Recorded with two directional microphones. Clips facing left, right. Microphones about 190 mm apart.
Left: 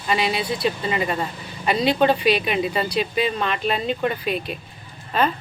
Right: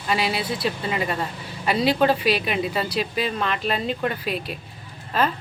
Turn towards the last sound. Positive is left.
turn(degrees=0)  # may be behind; listen again after turning